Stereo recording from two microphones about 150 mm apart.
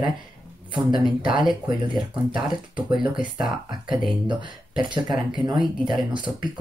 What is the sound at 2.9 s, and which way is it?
Speech, 5° right (ahead or behind).